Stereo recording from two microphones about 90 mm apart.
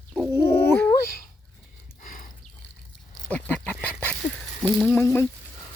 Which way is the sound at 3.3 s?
15° left (ahead or behind).